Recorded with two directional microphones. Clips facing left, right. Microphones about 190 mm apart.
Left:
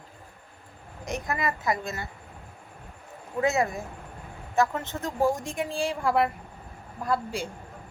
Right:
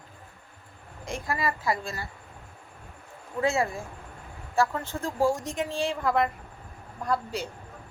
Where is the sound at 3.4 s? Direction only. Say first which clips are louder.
Left 1 dB; 20° left (ahead or behind).